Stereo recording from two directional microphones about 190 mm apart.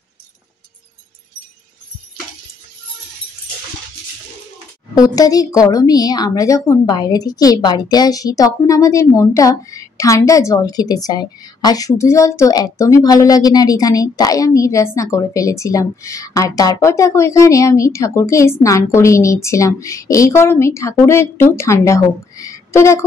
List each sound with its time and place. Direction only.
4.9 s a woman's voice: 20° left (ahead or behind)